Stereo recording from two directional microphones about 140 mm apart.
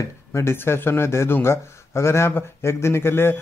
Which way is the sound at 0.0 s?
20° left (ahead or behind).